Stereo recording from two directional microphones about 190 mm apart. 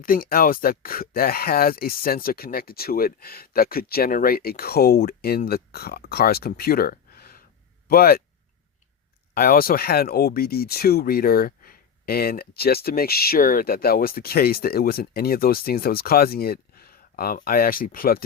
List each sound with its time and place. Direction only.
0.0 s speech: 50° left (ahead or behind)
9.3 s speech: 50° left (ahead or behind)